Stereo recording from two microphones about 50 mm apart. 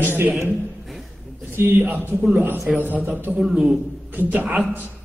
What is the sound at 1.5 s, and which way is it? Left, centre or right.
A man's voice, right.